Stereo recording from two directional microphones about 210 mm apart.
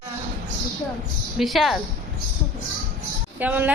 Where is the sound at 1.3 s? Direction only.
Centre (ahead or behind).